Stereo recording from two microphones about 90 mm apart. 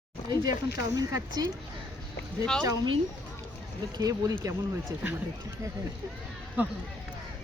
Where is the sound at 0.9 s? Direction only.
45° right (ahead or behind).